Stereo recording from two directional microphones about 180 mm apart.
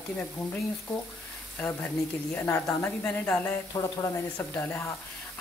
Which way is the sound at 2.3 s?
15° left (ahead or behind).